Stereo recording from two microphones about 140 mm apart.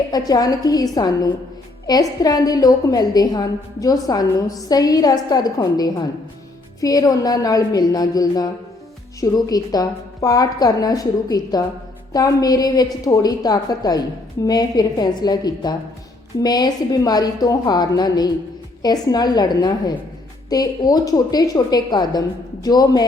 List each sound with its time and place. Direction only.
0.1 s a woman's voice: 25° left (ahead or behind)